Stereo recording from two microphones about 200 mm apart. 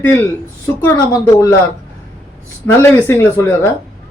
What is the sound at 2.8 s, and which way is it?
Speech, 10° left (ahead or behind).